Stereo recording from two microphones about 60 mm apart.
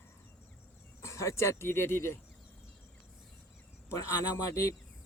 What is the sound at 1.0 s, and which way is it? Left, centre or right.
Speech, left.